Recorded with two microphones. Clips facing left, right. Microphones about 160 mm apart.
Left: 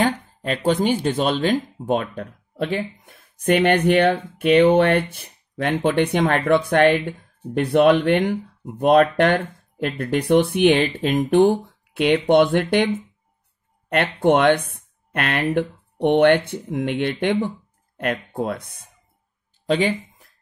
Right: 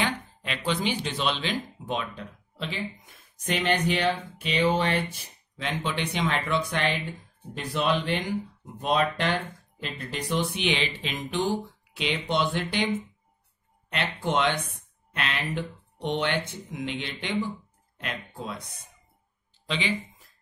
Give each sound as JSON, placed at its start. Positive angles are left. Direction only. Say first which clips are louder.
{"t": 0.0, "sound": "speech", "louder": "left 8 dB", "side_deg": 45}